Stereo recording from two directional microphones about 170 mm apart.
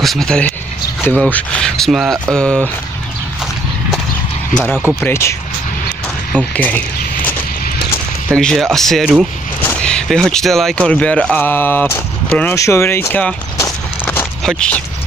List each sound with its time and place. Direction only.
0.0 s speech: centre (ahead or behind)
4.6 s speech: 10° left (ahead or behind)
6.3 s speech: 10° left (ahead or behind)
8.3 s speech: 5° left (ahead or behind)
14.0 s a sound: 5° left (ahead or behind)